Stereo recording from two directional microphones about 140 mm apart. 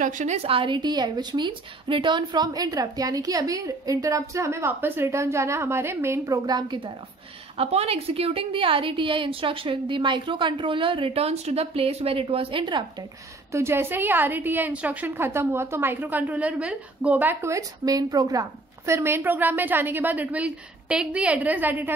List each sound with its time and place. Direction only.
0.0 s a woman's voice: 55° right (ahead or behind); by 6.9 s 30° right (ahead or behind)
7.5 s a woman's voice: 45° right (ahead or behind)
13.5 s a woman's voice: 20° right (ahead or behind)